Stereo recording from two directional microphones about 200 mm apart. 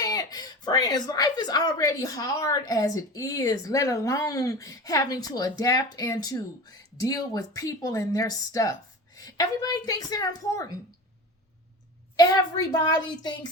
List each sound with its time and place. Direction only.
0.0 s a woman's voice: 20° left (ahead or behind)
12.1 s a woman's voice: 20° left (ahead or behind)